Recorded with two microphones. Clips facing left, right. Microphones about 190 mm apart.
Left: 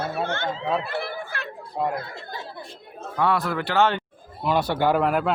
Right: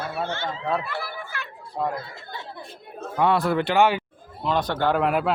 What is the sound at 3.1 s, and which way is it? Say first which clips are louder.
Speech: right 3 dB; 20° right (ahead or behind).